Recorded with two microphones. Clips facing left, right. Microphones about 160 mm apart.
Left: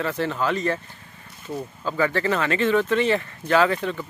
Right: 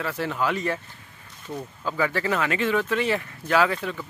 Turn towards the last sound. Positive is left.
turn(degrees=-5)  # may be behind; listen again after turning